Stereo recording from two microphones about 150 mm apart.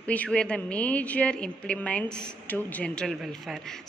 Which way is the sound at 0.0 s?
10° left (ahead or behind).